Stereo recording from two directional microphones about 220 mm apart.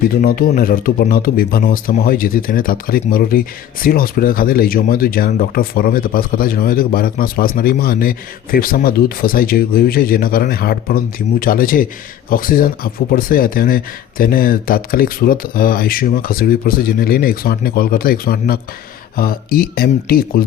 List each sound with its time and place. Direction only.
0.1 s speech: 40° left (ahead or behind)